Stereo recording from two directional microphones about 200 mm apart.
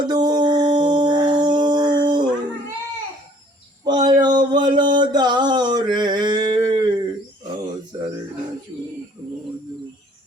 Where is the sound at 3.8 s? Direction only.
20° right (ahead or behind).